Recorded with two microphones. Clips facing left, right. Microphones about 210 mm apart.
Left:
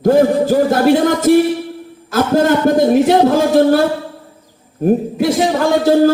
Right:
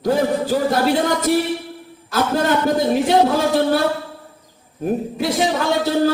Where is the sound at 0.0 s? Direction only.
50° left (ahead or behind).